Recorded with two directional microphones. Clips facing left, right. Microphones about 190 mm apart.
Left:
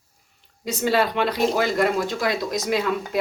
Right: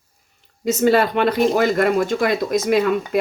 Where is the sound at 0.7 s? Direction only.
50° right (ahead or behind).